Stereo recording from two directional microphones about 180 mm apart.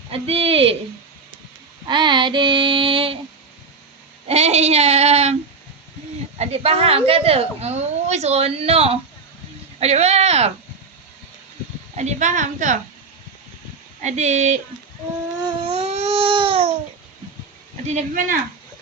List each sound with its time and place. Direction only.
0.1 s a woman's voice: 30° right (ahead or behind)
1.9 s child singing: 25° right (ahead or behind)
4.3 s a woman's voice: 35° right (ahead or behind)
6.4 s a woman's voice: 35° right (ahead or behind)
11.9 s a woman's voice: 40° right (ahead or behind)
14.0 s a woman's voice: 40° right (ahead or behind)
15.4 s baby cry: 35° right (ahead or behind)
17.8 s a woman's voice: 45° right (ahead or behind)